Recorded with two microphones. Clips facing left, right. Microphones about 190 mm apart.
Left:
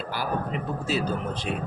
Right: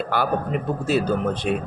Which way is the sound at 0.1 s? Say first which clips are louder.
Right 5 dB; 55° right (ahead or behind).